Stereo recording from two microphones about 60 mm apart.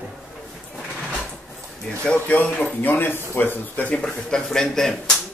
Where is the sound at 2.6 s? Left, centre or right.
Left.